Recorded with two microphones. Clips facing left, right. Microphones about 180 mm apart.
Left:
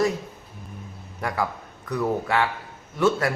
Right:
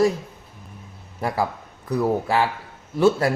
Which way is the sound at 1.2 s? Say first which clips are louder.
Right 3 dB; 30° right (ahead or behind).